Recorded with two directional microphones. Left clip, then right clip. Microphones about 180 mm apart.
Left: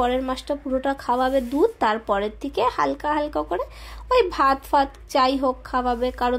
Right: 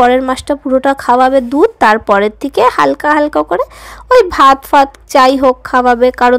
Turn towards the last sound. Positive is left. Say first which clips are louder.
# right 14 dB
turn(degrees=-35)  # may be behind; listen again after turning